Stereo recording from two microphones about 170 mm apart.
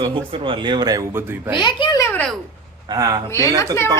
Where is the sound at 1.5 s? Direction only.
25° left (ahead or behind); by 2.4 s 5° left (ahead or behind).